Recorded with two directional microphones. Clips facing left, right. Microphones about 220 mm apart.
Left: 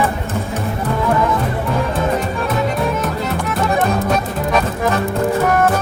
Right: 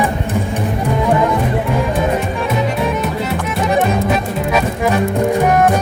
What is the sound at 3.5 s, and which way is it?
Music, 15° right (ahead or behind).